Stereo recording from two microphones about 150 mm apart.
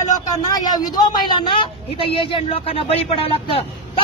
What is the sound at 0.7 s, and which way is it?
Speech, 25° left (ahead or behind).